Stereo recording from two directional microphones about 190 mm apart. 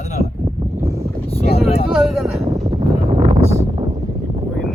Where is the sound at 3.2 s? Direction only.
35° right (ahead or behind).